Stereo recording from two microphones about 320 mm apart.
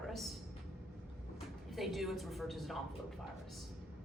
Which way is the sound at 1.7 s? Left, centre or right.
Centre.